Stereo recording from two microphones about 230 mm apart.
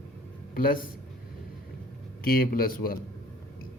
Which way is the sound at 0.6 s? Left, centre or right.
Left.